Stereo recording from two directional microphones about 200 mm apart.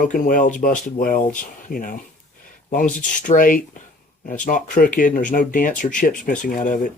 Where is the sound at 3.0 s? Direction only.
40° left (ahead or behind).